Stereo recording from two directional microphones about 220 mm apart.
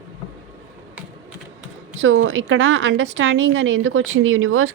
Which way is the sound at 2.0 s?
60° right (ahead or behind).